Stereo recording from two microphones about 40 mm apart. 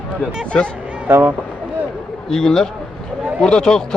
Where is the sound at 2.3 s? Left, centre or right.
Centre.